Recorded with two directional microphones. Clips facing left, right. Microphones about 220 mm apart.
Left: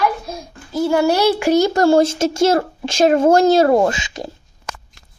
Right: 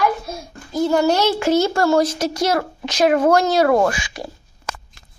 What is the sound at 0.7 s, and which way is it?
A woman's voice, 10° left (ahead or behind).